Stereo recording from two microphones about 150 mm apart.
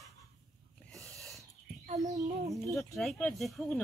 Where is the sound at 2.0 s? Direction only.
50° right (ahead or behind).